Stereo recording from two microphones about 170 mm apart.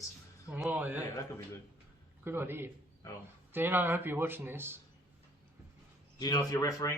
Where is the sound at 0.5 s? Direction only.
10° right (ahead or behind).